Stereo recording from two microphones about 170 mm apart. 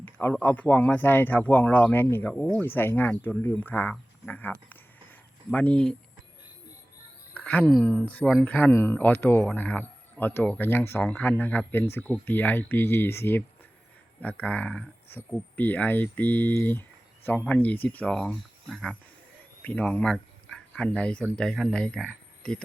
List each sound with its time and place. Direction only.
0.0 s speech: 10° left (ahead or behind)
7.3 s speech: 10° left (ahead or behind)